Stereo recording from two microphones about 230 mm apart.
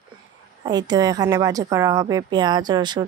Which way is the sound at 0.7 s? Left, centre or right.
Centre.